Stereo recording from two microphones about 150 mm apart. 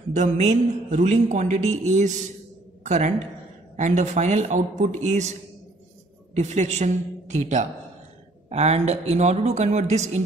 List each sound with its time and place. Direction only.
0.1 s a woman's voice: 50° right (ahead or behind)
6.3 s a woman's voice: 50° right (ahead or behind)